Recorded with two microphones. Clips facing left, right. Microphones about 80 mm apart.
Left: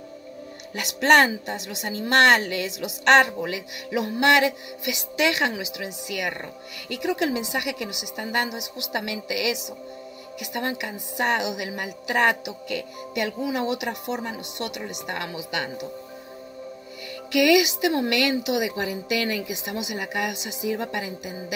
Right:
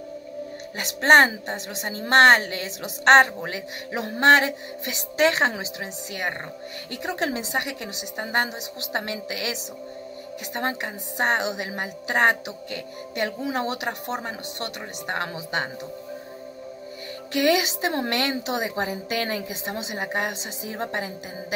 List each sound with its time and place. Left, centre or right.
0.7 s a woman's voice: right
17.3 s a woman's voice: right